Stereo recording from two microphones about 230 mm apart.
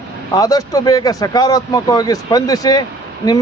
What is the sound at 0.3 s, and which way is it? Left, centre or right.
A man's voice, centre.